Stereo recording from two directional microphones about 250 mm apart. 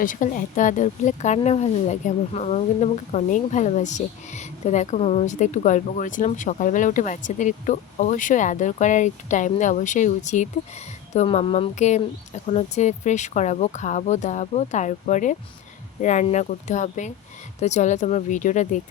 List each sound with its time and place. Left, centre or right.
0.0 s speech: left